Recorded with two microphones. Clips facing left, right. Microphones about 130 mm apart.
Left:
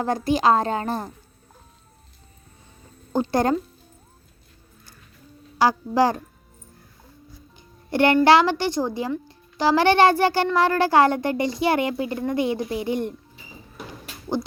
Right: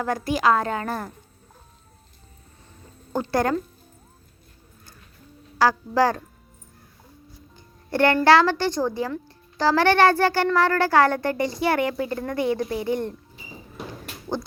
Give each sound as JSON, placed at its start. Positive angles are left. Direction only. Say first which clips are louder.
{"t": 0.0, "sound": "a woman's voice", "louder": "left 2 dB", "side_deg": 25}
{"t": 3.1, "sound": "speech", "louder": "left 2 dB", "side_deg": 20}
{"t": 5.5, "sound": "speech", "louder": "left 1 dB", "side_deg": 15}
{"t": 7.5, "sound": "a woman's voice", "louder": "left 2 dB", "side_deg": 20}